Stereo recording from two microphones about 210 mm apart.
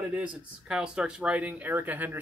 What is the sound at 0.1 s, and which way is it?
Speech, 5° right (ahead or behind).